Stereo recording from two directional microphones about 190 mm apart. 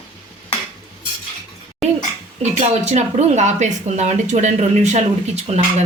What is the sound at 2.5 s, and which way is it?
Speech, 35° right (ahead or behind).